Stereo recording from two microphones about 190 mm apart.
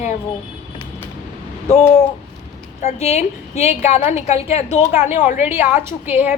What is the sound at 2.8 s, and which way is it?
A woman's voice, 35° left (ahead or behind).